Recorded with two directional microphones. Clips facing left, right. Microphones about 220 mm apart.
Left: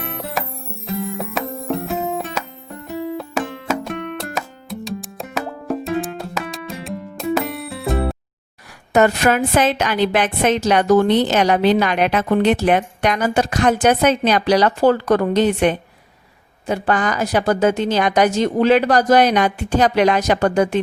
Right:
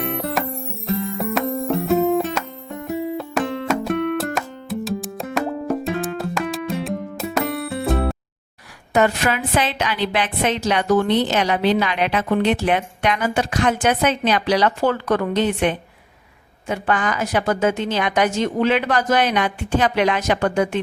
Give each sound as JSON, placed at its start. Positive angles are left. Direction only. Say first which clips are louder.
{"t": 0.1, "sound": "music", "louder": "right 3 dB", "side_deg": 0}
{"t": 8.9, "sound": "a woman's voice", "louder": "left 4 dB", "side_deg": 45}